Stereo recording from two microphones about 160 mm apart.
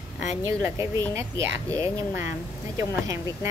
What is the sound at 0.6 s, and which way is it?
A woman's voice, 15° right (ahead or behind).